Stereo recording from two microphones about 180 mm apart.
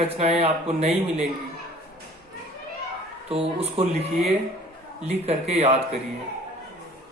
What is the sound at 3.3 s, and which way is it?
Speech, 35° right (ahead or behind).